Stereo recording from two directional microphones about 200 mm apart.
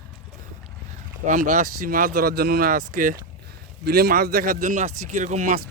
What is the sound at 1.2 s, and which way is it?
Speech, 40° right (ahead or behind).